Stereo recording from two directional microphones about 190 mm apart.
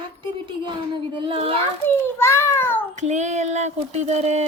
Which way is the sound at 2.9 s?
35° right (ahead or behind).